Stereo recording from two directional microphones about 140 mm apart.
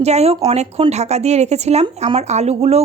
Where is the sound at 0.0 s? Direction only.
50° right (ahead or behind).